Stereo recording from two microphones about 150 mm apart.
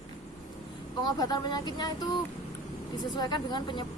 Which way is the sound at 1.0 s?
30° left (ahead or behind).